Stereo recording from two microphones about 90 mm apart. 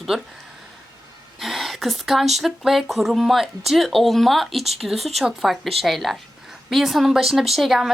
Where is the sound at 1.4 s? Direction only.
Centre (ahead or behind).